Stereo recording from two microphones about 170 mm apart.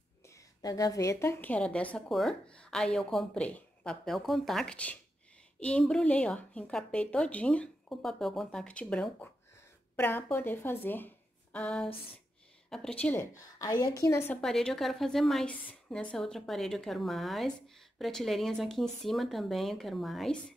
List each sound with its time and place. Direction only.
0.3 s a woman's voice: 20° left (ahead or behind)
14.4 s a woman's voice: centre (ahead or behind)